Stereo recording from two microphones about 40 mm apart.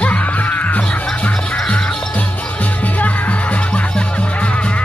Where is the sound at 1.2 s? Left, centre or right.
Left.